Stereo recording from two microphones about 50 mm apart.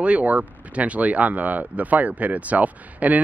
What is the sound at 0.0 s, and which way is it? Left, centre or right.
Speech, right.